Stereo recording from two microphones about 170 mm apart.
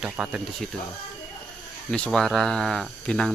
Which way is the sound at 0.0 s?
5° right (ahead or behind).